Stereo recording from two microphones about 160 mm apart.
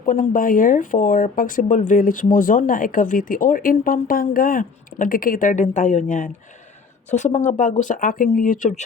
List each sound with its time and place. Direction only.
0.0 s speech: 55° left (ahead or behind)